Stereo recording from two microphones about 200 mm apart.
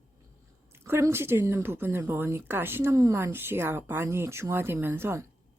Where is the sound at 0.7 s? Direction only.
15° right (ahead or behind).